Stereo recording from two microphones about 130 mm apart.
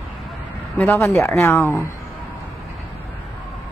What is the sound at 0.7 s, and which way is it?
Speech, 15° left (ahead or behind).